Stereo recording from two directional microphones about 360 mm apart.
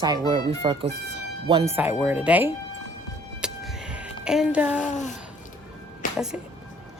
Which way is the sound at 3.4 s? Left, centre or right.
Centre.